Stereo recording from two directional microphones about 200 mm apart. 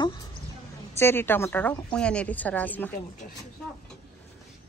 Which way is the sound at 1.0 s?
10° left (ahead or behind).